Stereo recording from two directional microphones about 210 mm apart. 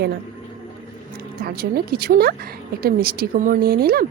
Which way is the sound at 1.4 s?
45° right (ahead or behind).